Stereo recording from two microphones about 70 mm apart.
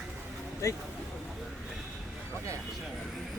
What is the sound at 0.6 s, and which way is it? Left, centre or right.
Speech, left.